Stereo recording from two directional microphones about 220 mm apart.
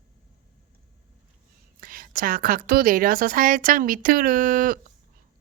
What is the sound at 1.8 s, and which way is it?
Speech, 40° right (ahead or behind).